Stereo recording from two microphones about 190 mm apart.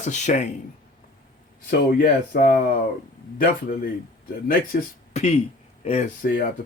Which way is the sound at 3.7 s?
50° left (ahead or behind).